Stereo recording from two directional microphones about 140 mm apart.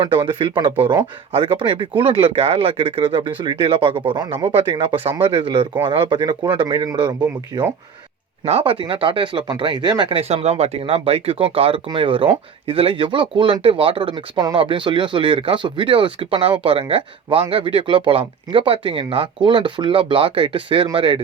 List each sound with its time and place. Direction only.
0.0 s speech: 35° right (ahead or behind)
8.4 s speech: 45° right (ahead or behind)